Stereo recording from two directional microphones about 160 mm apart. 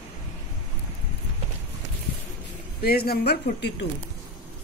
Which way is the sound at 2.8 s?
75° left (ahead or behind).